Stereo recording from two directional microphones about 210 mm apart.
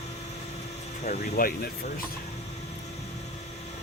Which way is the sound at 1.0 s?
45° left (ahead or behind).